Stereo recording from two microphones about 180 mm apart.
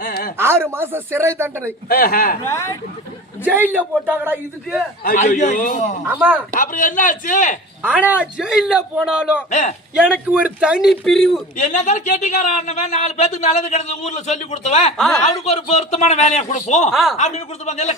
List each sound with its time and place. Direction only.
0.0 s a sound: 55° left (ahead or behind)
0.3 s speech: 15° right (ahead or behind)
1.9 s speech: 55° left (ahead or behind)
2.5 s speech: 15° left (ahead or behind)
3.4 s speech: 10° right (ahead or behind)
5.0 s a man's voice: 45° left (ahead or behind)
6.1 s speech: 10° right (ahead or behind)
6.6 s a man's voice: 45° left (ahead or behind)
7.8 s speech: 10° right (ahead or behind)
9.5 s a man's voice: 40° left (ahead or behind)
10.2 s speech: 5° right (ahead or behind)
11.5 s speech: 45° left (ahead or behind)
16.9 s speech: centre (ahead or behind)
17.2 s speech: 40° left (ahead or behind)